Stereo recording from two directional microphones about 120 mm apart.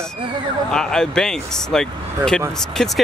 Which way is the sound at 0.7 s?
5° left (ahead or behind).